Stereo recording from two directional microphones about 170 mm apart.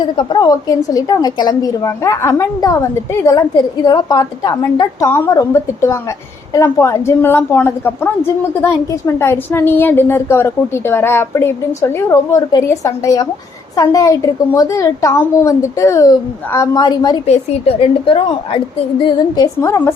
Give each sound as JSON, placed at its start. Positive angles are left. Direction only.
{"t": 0.0, "sound": "a woman's voice", "side_deg": 25}
{"t": 17.2, "sound": "a woman's voice", "side_deg": 35}
{"t": 19.0, "sound": "a woman's voice", "side_deg": 20}